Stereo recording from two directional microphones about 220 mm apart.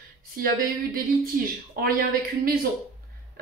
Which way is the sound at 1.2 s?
45° right (ahead or behind).